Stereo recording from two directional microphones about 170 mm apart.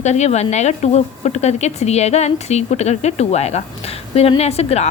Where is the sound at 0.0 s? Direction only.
40° left (ahead or behind).